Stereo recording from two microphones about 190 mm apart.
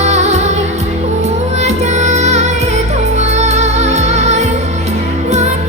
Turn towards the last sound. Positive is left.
turn(degrees=-35)  # may be behind; listen again after turning